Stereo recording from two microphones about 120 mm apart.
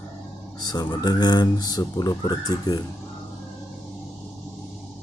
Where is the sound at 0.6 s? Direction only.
35° left (ahead or behind).